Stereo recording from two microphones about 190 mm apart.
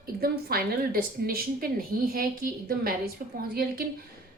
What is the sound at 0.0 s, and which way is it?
A woman's voice, 50° right (ahead or behind).